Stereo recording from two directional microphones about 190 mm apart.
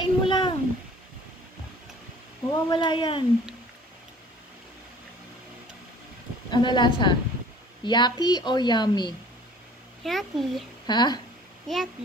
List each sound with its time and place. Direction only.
0.0 s a sound: 25° left (ahead or behind)
2.5 s a woman's voice: 25° left (ahead or behind)
6.5 s a woman's voice: 25° left (ahead or behind)
10.0 s a child's voice: centre (ahead or behind)
10.9 s a woman's voice: 20° left (ahead or behind)
11.6 s a child's voice: centre (ahead or behind)